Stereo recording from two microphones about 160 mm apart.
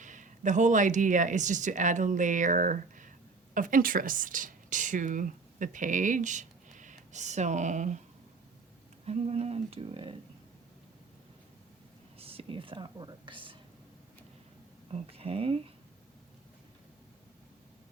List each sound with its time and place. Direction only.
0.0 s a woman's voice: 50° right (ahead or behind)
9.0 s speech: 40° right (ahead or behind)
12.2 s speech: 35° right (ahead or behind)
14.8 s speech: 40° right (ahead or behind)